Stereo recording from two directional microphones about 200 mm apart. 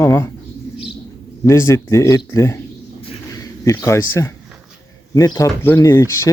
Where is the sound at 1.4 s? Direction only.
15° left (ahead or behind).